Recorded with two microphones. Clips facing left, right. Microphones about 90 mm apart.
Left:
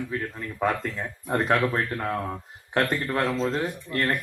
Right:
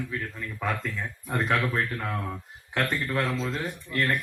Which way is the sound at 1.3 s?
35° left (ahead or behind).